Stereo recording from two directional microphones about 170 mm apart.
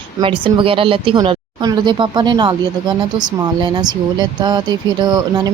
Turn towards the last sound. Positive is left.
turn(degrees=-25)  # may be behind; listen again after turning